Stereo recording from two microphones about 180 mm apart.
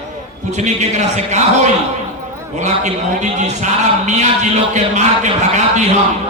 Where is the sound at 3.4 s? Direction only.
40° right (ahead or behind).